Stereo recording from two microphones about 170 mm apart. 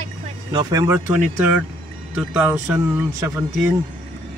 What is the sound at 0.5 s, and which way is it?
Speech, 20° right (ahead or behind).